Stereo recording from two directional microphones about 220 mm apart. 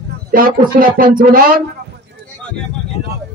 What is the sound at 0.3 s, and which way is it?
A man's voice, 40° right (ahead or behind).